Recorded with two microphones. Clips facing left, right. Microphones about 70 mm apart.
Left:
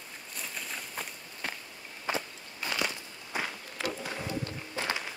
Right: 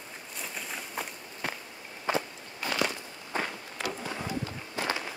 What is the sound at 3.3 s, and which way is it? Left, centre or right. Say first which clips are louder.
Walk: right 2 dB; centre.